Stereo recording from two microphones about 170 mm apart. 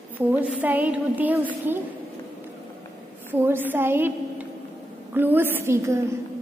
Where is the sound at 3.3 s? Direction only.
10° right (ahead or behind).